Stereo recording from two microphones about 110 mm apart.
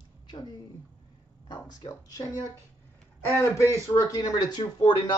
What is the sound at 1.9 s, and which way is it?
Speech, 35° left (ahead or behind).